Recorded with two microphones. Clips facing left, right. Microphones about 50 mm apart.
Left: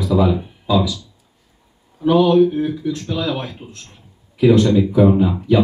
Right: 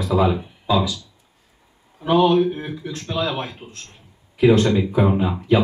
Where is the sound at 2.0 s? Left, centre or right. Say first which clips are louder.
Left 3 dB; right.